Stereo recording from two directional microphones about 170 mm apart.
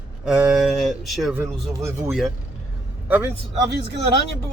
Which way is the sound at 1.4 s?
10° right (ahead or behind).